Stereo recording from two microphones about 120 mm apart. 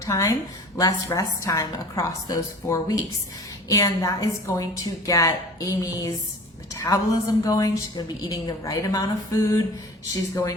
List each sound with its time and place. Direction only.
0.0 s a woman's voice: 25° left (ahead or behind)